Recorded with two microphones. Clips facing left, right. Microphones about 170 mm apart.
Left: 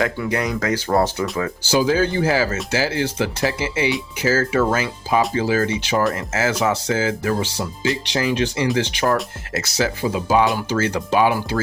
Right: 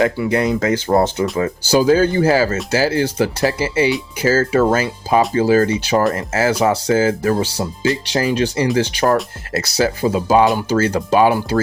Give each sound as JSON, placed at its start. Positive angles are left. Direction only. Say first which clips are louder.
{"t": 0.3, "sound": "speech", "louder": "right 5 dB", "side_deg": -25}
{"t": 1.7, "sound": "speech", "louder": "right 5 dB", "side_deg": -45}